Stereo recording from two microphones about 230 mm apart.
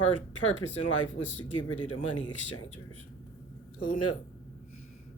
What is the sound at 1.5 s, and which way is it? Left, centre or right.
Speech, left.